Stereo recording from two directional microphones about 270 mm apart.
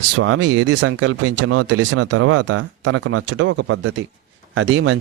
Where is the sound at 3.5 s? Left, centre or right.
Right.